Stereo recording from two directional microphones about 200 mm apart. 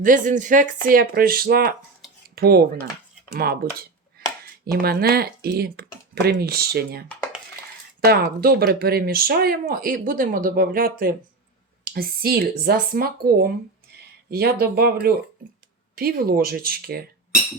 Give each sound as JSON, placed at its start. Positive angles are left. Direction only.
{"t": 0.0, "sound": "speech", "side_deg": -40}
{"t": 8.0, "sound": "speech", "side_deg": -50}